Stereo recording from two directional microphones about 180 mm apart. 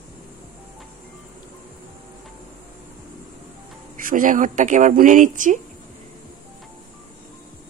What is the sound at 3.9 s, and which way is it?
Speech, 50° right (ahead or behind).